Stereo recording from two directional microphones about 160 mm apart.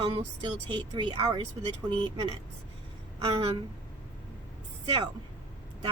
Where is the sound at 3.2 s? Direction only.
35° right (ahead or behind).